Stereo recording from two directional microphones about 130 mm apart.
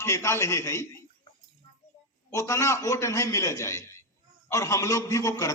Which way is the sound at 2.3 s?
25° left (ahead or behind).